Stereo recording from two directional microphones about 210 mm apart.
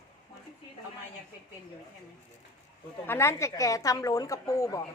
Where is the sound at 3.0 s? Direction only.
10° left (ahead or behind).